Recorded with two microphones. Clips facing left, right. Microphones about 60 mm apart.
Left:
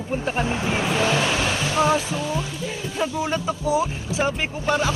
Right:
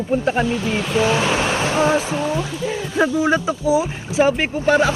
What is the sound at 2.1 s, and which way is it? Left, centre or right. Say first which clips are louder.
Speech: right 4 dB; right.